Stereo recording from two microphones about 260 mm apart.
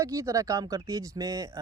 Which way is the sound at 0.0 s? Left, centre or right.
Centre.